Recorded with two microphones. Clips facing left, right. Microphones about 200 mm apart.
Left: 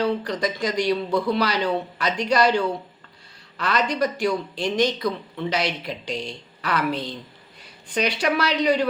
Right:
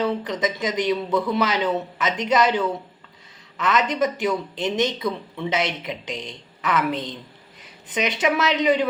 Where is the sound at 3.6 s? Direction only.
20° right (ahead or behind).